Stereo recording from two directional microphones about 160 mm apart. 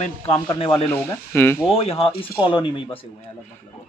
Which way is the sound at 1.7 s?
35° left (ahead or behind).